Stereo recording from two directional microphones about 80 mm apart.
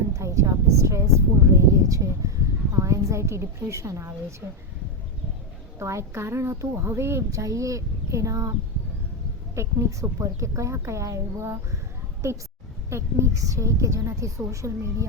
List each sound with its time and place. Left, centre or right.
0.1 s a sound: right
2.7 s a woman's voice: right
5.8 s a woman's voice: right
9.6 s a woman's voice: right
12.9 s a woman's voice: right